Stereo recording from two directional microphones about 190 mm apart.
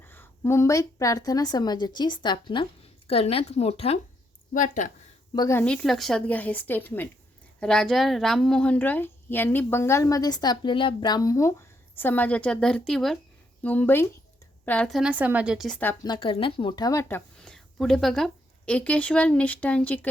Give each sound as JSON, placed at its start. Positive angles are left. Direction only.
{"t": 0.0, "sound": "a woman's voice", "side_deg": 10}
{"t": 5.3, "sound": "a woman's voice", "side_deg": 20}
{"t": 16.0, "sound": "speech", "side_deg": 25}